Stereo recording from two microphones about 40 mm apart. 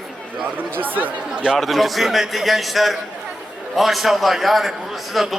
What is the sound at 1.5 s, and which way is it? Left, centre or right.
A man's voice, centre.